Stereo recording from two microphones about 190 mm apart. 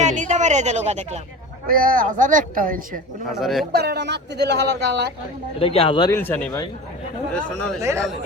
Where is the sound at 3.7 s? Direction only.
55° right (ahead or behind).